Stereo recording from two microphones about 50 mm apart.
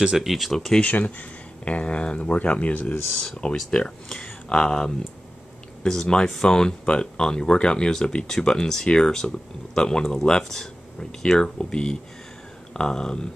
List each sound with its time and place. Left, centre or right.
0.0 s speech: centre
0.7 s speech: left
3.2 s speech: centre